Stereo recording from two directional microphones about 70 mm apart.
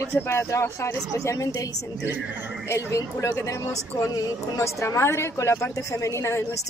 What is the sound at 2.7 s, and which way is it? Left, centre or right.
Speech, left.